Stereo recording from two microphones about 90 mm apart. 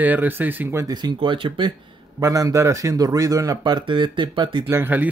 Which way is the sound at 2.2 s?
35° right (ahead or behind).